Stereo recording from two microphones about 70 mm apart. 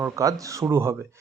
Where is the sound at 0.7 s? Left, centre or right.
Right.